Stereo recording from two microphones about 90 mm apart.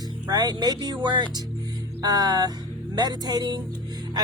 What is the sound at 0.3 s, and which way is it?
Music, 45° right (ahead or behind).